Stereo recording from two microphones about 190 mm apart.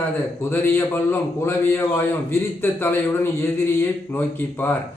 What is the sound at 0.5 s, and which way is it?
Speech, 10° left (ahead or behind).